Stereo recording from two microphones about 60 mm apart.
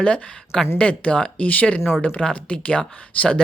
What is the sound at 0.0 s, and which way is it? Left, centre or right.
Speech, centre.